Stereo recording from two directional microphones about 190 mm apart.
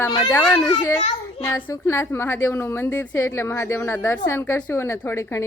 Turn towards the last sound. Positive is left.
turn(degrees=15)  # may be behind; listen again after turning